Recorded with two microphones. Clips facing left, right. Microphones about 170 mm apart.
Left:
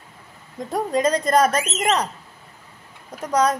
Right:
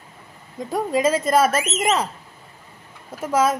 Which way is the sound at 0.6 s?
Centre (ahead or behind).